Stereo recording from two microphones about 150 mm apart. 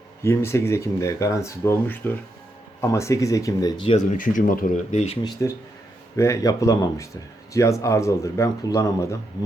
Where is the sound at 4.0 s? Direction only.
60° left (ahead or behind).